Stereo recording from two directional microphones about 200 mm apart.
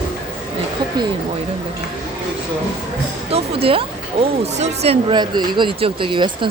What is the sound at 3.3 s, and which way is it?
Speech, 30° right (ahead or behind).